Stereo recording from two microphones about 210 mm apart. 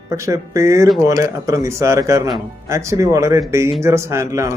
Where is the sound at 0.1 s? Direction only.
15° right (ahead or behind).